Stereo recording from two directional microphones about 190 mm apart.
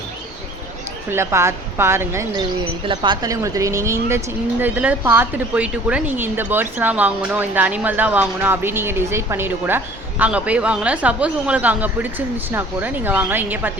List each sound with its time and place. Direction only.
1.1 s a woman's voice: 15° right (ahead or behind)
2.8 s a woman's voice: 25° right (ahead or behind); by 13.7 s 10° right (ahead or behind)